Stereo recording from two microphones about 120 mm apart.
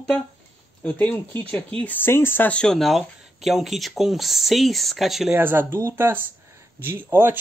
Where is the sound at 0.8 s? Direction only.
15° left (ahead or behind); by 5.3 s centre (ahead or behind).